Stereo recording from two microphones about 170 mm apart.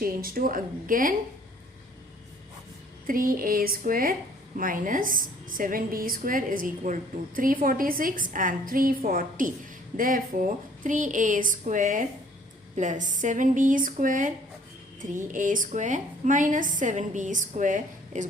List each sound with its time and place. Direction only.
0.0 s a woman's voice: 60° right (ahead or behind)
3.1 s a woman's voice: 55° right (ahead or behind)